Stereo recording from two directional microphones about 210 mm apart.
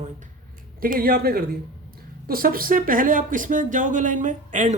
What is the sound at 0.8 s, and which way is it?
A man's voice, 45° right (ahead or behind).